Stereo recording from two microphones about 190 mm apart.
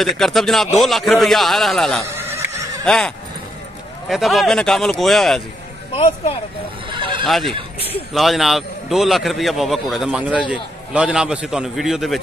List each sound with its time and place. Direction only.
0.0 s a man's voice: centre (ahead or behind)
2.1 s neigh: 15° right (ahead or behind)
2.8 s speech: 5° left (ahead or behind)
4.1 s a man's voice: centre (ahead or behind)
6.9 s horse: 25° right (ahead or behind)
7.2 s a man's voice: centre (ahead or behind)